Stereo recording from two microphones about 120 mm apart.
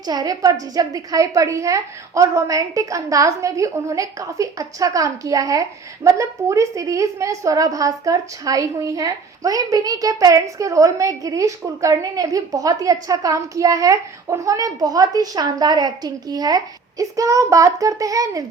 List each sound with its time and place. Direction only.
0.0 s a woman's voice: 35° right (ahead or behind)